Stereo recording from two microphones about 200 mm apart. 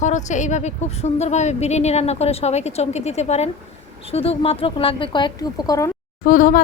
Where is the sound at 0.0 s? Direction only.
35° left (ahead or behind); by 5.9 s 15° left (ahead or behind).